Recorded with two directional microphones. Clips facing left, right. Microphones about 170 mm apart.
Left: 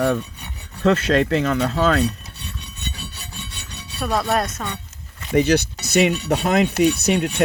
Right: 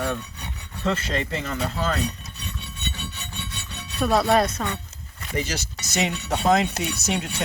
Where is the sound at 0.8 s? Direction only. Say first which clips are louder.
Left 9 dB; 70° left (ahead or behind).